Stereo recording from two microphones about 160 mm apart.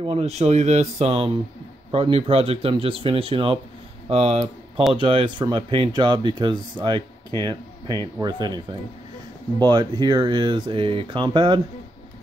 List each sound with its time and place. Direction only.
0.0 s speech: 40° right (ahead or behind)
8.2 s speech: 25° right (ahead or behind)